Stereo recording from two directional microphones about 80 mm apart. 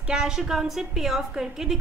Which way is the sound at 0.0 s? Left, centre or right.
Centre.